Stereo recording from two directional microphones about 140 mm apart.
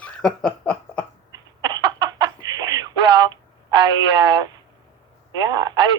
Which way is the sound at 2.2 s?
30° right (ahead or behind).